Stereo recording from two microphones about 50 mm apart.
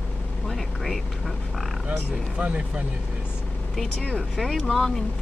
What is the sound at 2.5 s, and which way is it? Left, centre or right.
Speech, right.